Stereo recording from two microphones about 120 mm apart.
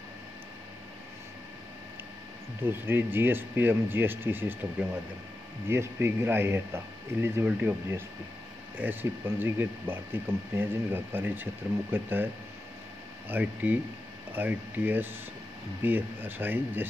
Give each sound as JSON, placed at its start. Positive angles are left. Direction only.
{"t": 2.6, "sound": "speech", "side_deg": -15}
{"t": 13.3, "sound": "speech", "side_deg": -15}